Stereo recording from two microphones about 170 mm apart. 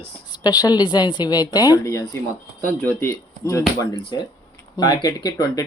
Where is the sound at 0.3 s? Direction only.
25° left (ahead or behind).